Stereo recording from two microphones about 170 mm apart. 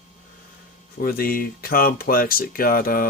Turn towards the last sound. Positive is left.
turn(degrees=60)  # may be behind; listen again after turning